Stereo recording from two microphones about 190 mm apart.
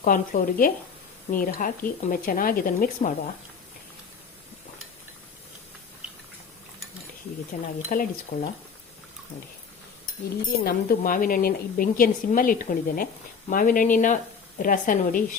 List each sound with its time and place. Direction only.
0.0 s a woman's voice: 45° left (ahead or behind)
7.5 s a woman's voice: 40° left (ahead or behind)
10.6 s a woman's voice: 50° left (ahead or behind)